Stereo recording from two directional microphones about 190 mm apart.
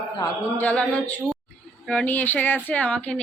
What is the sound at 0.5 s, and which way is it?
Speech, 5° left (ahead or behind).